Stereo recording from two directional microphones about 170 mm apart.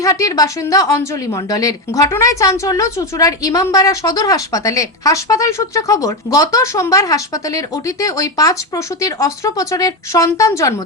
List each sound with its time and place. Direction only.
0.0 s speech: 20° left (ahead or behind)